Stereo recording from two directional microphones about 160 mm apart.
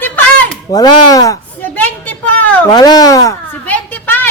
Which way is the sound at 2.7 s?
25° left (ahead or behind).